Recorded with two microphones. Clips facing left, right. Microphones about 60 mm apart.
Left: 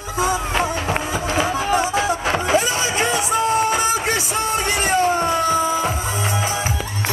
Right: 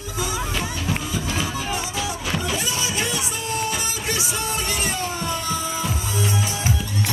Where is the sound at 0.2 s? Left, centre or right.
Left.